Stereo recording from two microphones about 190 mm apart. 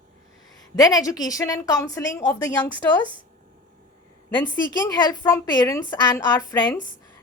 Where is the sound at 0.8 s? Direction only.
20° left (ahead or behind).